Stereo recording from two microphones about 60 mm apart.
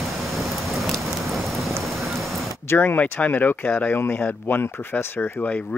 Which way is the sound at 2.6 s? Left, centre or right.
Left.